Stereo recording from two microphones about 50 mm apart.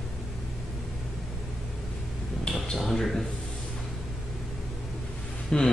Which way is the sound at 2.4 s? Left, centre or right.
Centre.